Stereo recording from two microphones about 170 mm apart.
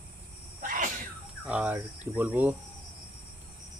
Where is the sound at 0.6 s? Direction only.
55° right (ahead or behind).